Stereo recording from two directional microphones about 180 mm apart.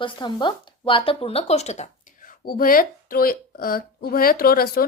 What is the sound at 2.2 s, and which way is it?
Speech, 50° left (ahead or behind).